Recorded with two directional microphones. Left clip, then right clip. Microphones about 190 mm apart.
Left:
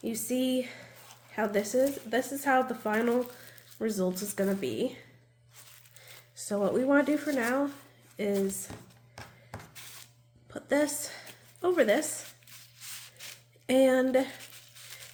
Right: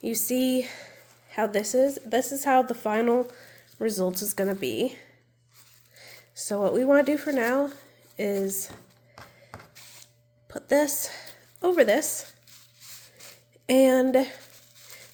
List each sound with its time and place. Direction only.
0.0 s a woman's voice: 55° right (ahead or behind)
10.5 s a woman's voice: 45° right (ahead or behind)
13.7 s speech: 40° right (ahead or behind)